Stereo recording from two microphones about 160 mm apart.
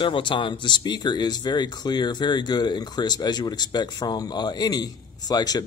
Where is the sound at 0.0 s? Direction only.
30° left (ahead or behind).